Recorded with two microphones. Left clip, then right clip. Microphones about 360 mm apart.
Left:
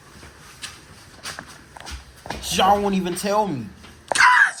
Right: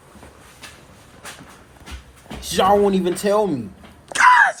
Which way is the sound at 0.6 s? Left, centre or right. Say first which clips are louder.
Left 4 dB; centre.